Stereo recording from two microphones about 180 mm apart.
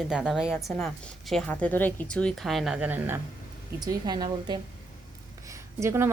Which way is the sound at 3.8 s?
25° right (ahead or behind).